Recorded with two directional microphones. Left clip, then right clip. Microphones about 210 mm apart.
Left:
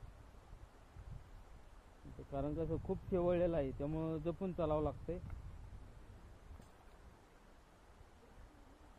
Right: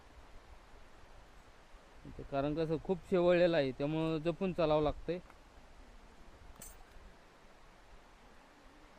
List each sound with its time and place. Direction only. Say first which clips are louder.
2.3 s speech: right 6 dB; 35° right (ahead or behind)